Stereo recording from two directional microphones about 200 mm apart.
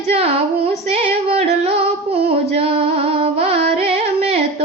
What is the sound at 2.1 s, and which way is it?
Carnatic music, 30° right (ahead or behind).